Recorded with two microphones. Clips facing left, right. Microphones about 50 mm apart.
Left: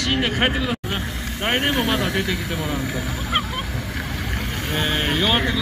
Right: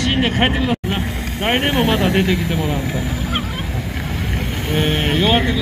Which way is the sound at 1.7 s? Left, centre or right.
Centre.